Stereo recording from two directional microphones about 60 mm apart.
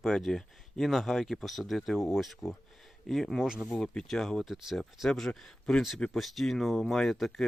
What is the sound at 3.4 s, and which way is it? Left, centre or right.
Speech, centre.